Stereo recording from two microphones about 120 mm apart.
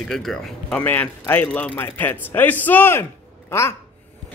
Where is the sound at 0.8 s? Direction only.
15° left (ahead or behind).